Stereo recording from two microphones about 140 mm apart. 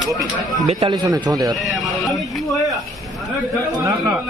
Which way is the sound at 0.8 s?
30° right (ahead or behind).